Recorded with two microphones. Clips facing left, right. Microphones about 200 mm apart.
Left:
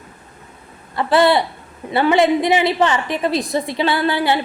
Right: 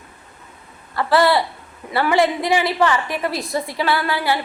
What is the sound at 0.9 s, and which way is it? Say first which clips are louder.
A woman's voice: left 2 dB; 20° left (ahead or behind).